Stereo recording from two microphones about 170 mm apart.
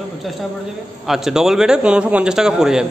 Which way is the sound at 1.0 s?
Centre (ahead or behind).